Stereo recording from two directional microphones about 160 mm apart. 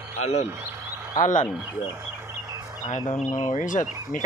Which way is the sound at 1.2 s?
55° left (ahead or behind).